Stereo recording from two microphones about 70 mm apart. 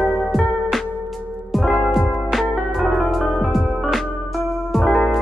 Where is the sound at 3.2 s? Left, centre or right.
Centre.